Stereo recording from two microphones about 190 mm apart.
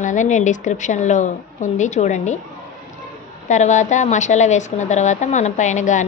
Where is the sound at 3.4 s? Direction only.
40° left (ahead or behind).